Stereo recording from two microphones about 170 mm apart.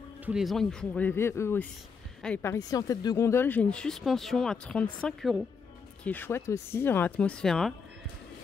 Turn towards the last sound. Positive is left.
turn(degrees=5)  # may be behind; listen again after turning